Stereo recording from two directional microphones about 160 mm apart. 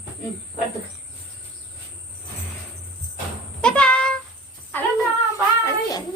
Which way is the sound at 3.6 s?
5° left (ahead or behind).